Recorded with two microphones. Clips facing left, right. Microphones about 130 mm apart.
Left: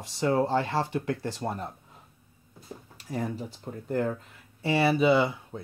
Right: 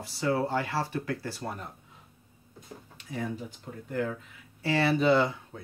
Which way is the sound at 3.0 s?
35° left (ahead or behind).